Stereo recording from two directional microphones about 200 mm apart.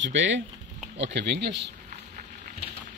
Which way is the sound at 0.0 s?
65° right (ahead or behind).